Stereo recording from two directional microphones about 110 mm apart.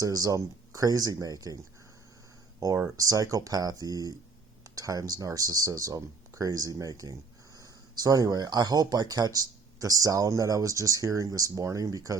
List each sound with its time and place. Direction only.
0.0 s speech: 35° right (ahead or behind)
2.6 s speech: 30° right (ahead or behind)